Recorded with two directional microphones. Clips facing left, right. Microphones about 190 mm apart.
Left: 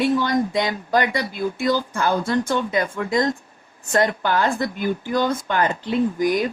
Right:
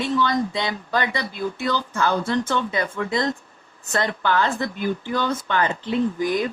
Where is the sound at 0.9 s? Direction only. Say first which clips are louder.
Left 4 dB; 15° left (ahead or behind).